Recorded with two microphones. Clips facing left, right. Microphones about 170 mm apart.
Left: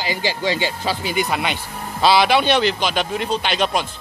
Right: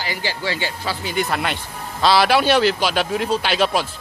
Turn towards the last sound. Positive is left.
turn(degrees=-5)  # may be behind; listen again after turning